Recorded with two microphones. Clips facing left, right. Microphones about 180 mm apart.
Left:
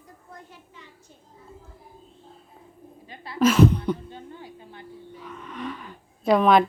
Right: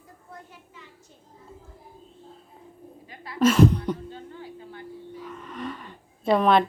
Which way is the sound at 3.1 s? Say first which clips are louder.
Left 3 dB; 25° left (ahead or behind).